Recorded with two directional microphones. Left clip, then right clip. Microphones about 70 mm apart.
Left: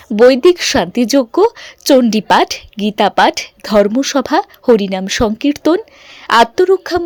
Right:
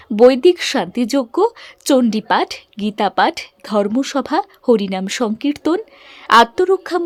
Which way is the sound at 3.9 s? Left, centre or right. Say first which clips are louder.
Left 4 dB; left.